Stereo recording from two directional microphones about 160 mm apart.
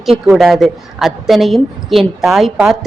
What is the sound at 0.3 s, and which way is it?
A woman's voice, centre (ahead or behind).